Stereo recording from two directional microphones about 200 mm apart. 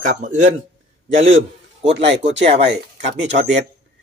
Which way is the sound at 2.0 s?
65° right (ahead or behind).